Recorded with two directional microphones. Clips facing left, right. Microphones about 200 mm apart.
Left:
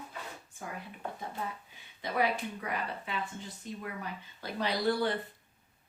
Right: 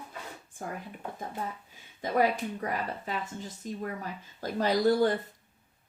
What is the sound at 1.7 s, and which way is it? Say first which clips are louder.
Speech: right 7 dB; 45° right (ahead or behind).